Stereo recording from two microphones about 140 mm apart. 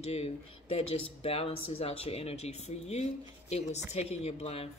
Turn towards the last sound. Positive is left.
turn(degrees=45)  # may be behind; listen again after turning